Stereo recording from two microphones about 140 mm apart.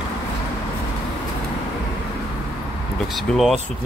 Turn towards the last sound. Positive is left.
turn(degrees=0)  # may be behind; listen again after turning